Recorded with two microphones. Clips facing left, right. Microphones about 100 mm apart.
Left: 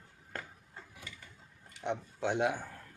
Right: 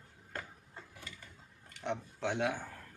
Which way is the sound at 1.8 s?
15° left (ahead or behind).